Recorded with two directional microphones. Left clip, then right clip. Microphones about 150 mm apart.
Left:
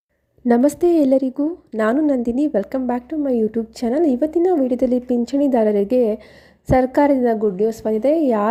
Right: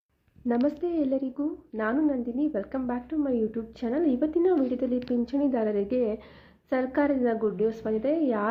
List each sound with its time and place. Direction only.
0.4 s a woman's voice: 65° left (ahead or behind); by 7.3 s 50° left (ahead or behind)
7.4 s a woman's voice: 40° left (ahead or behind)